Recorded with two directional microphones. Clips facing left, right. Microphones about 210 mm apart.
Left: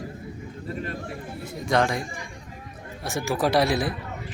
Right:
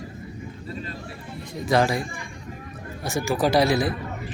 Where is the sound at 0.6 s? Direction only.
55° left (ahead or behind).